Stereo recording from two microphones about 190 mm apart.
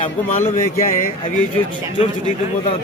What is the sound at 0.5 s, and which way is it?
Speech, 45° left (ahead or behind).